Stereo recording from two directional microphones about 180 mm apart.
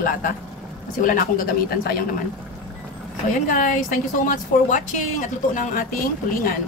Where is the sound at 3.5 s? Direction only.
45° left (ahead or behind).